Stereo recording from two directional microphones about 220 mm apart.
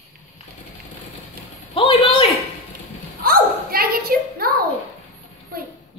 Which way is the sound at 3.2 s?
40° right (ahead or behind).